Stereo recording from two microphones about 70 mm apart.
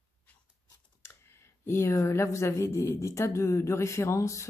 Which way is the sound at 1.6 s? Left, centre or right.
Left.